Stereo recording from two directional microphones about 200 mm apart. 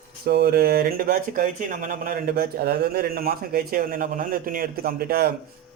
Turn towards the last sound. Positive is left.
turn(degrees=-50)  # may be behind; listen again after turning